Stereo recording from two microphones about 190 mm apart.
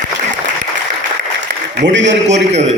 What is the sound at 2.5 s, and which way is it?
Speech, 35° right (ahead or behind).